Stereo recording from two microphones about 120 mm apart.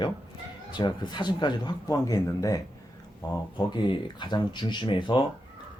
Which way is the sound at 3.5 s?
40° left (ahead or behind).